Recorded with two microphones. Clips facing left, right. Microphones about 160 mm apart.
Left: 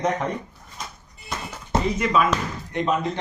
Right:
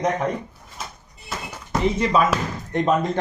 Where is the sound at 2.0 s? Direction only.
35° right (ahead or behind).